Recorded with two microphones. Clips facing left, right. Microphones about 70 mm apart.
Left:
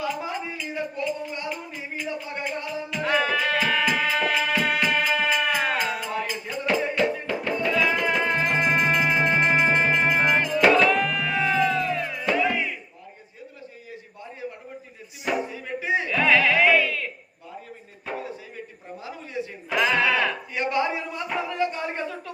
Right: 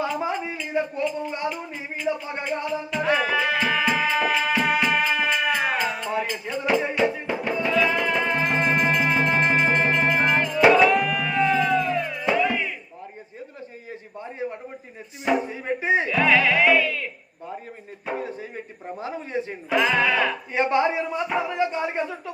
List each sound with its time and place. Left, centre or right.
0.0 s a sound: right
0.7 s a man's voice: centre
2.1 s a man's voice: right
2.9 s music: centre
6.7 s music: centre
7.7 s music: centre
10.6 s music: centre
15.4 s music: right
16.0 s music: centre
18.1 s a sound: right
19.7 s sheep: centre
20.5 s a man's voice: right